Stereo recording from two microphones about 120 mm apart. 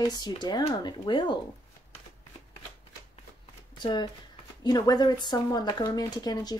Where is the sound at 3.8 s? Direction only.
40° left (ahead or behind).